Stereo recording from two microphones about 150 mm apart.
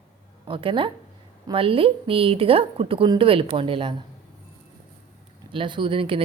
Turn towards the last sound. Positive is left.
turn(degrees=-35)  # may be behind; listen again after turning